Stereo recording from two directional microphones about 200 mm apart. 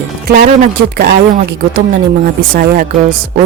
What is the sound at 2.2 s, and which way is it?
Speech, 45° right (ahead or behind).